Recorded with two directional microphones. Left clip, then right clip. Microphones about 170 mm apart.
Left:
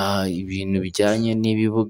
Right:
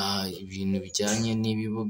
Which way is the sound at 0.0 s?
50° left (ahead or behind).